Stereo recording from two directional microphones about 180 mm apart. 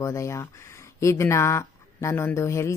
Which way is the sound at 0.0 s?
15° left (ahead or behind).